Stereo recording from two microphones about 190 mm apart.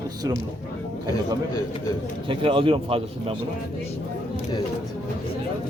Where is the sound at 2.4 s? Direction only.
25° right (ahead or behind).